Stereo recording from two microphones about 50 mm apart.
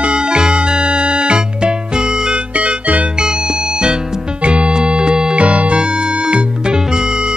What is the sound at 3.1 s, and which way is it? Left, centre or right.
Music, centre.